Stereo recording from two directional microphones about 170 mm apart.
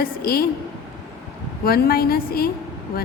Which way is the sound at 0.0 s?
60° left (ahead or behind).